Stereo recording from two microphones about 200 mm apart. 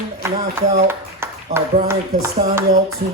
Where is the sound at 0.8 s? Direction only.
10° right (ahead or behind).